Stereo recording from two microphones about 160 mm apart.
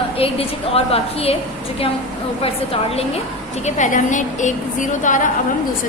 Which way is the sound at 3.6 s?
50° left (ahead or behind).